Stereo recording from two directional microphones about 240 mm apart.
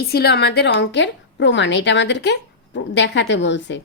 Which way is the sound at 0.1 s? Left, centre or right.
Left.